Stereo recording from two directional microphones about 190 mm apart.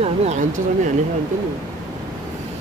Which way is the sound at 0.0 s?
35° right (ahead or behind).